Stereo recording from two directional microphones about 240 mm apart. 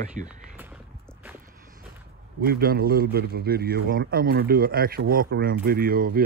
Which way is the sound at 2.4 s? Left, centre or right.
Right.